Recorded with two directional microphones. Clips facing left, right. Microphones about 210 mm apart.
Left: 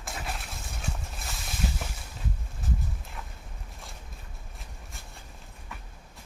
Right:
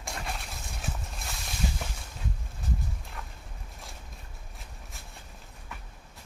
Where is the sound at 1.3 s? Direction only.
Centre (ahead or behind).